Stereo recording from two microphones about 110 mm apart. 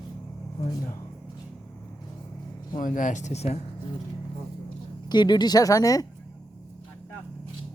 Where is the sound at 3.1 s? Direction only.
85° left.